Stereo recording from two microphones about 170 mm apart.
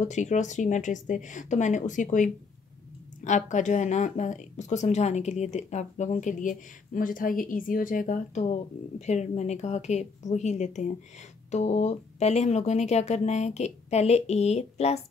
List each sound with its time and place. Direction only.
0.1 s speech: 45° left (ahead or behind)